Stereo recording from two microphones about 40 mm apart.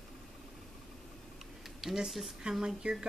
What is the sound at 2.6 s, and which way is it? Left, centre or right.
Speech, centre.